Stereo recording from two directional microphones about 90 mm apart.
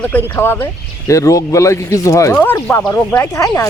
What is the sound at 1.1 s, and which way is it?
Speech, 35° left (ahead or behind).